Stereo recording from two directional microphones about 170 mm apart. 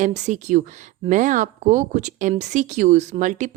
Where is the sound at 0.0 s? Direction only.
45° right (ahead or behind).